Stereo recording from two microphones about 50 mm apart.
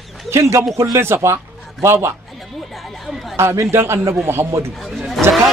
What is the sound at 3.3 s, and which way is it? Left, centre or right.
A man's voice, right.